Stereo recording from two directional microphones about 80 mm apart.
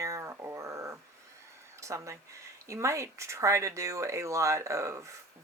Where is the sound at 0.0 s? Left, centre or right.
Right.